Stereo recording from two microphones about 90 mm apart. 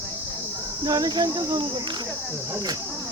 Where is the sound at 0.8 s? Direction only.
45° right (ahead or behind).